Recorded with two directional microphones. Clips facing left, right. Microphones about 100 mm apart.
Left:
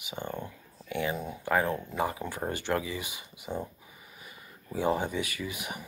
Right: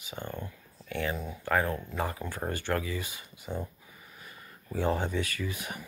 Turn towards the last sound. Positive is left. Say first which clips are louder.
# even
turn(degrees=15)  # may be behind; listen again after turning